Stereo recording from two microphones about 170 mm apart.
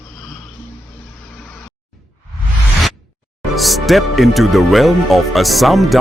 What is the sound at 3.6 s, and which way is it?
Speech, centre (ahead or behind).